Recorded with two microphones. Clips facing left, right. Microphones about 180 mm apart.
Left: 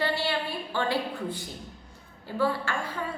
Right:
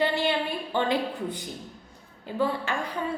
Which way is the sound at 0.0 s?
20° right (ahead or behind).